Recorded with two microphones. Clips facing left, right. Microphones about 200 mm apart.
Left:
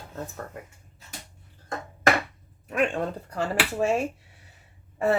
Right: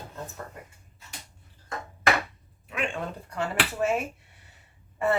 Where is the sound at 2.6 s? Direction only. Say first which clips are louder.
Left 7 dB; 45° left (ahead or behind).